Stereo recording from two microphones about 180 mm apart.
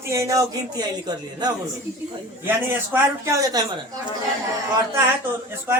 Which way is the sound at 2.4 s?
10° right (ahead or behind).